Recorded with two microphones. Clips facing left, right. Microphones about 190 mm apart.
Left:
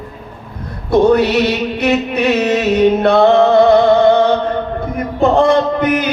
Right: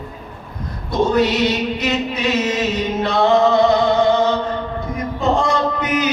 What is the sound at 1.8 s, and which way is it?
Music, 60° left (ahead or behind).